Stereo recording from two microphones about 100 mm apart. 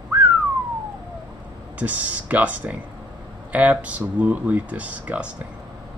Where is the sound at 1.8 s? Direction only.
15° right (ahead or behind).